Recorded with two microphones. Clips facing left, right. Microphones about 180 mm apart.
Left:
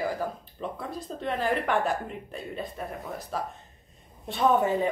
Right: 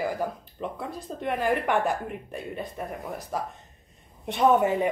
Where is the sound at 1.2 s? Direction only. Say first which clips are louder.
Right 2 dB; 10° right (ahead or behind).